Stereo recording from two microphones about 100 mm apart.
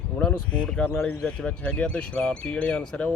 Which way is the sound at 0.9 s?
20° left (ahead or behind).